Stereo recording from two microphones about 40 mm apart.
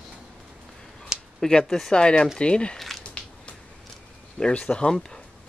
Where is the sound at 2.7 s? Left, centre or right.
Centre.